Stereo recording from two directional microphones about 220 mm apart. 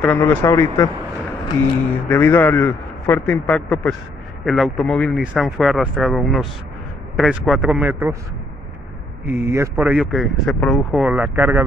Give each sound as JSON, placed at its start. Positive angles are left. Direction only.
{"t": 0.0, "sound": "a man's voice", "side_deg": 10}
{"t": 2.0, "sound": "a man's voice", "side_deg": 10}
{"t": 9.2, "sound": "speech", "side_deg": -10}